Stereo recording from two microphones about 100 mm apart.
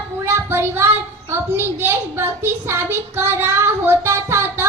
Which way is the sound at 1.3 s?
25° right (ahead or behind).